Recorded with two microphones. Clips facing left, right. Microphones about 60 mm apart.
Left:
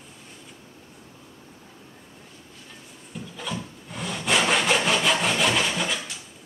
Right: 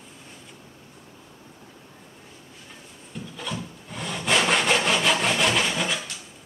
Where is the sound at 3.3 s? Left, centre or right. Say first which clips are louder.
Left 1 dB; centre.